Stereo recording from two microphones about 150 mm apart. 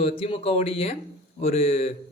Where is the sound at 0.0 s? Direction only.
40° left (ahead or behind).